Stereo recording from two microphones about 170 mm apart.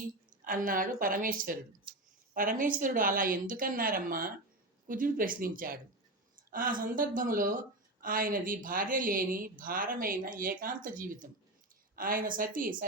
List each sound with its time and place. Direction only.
0.4 s a woman's voice: 55° right (ahead or behind)